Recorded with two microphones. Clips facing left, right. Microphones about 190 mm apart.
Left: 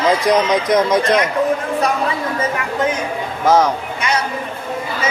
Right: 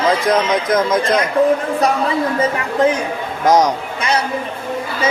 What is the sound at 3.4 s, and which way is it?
Speech, 15° right (ahead or behind).